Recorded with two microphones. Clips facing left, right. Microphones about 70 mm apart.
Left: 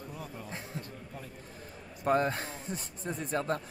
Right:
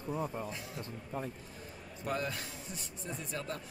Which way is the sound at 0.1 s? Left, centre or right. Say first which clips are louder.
Right 11 dB; right.